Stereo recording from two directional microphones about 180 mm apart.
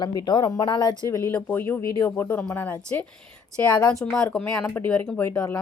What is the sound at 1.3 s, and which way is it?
Speech, 10° left (ahead or behind).